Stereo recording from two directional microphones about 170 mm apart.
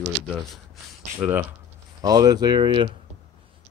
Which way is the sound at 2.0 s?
20° right (ahead or behind).